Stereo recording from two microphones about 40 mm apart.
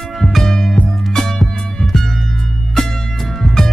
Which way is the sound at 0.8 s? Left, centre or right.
Left.